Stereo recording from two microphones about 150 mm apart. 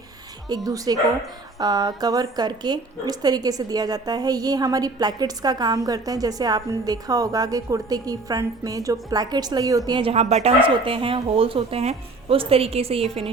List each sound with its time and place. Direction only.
0.4 s a woman's voice: 25° right (ahead or behind)